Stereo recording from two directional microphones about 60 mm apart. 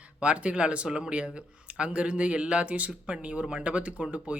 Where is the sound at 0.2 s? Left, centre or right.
Centre.